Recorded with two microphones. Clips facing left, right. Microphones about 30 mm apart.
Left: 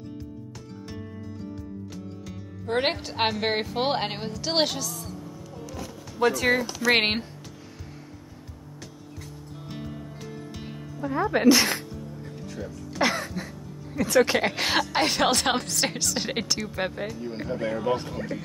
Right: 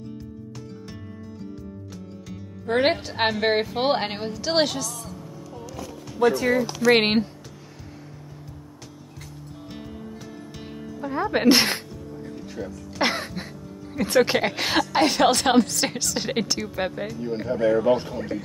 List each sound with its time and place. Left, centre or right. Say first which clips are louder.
2.2 s a woman's voice: right 5 dB; centre
6.2 s speech: right 2 dB; left
6.9 s a woman's voice: right 4 dB; centre
9.7 s music: even; centre
11.0 s music: even; centre
11.4 s speech: right 1 dB; right
11.9 s music: right 2 dB; centre
13.1 s music: right 1 dB; right
14.0 s a woman's voice: right 1 dB; centre